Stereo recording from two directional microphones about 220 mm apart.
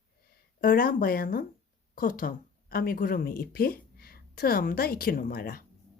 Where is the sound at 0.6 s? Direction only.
40° left (ahead or behind).